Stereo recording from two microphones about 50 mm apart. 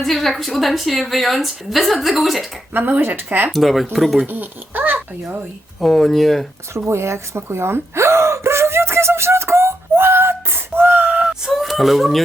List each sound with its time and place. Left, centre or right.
0.0 s a woman's voice: centre
2.7 s speech: right
3.5 s a woman's voice: centre
4.3 s a child's voice: right
5.8 s a woman's voice: centre
6.7 s gasp: right
9.9 s a sound: right
11.5 s speech: centre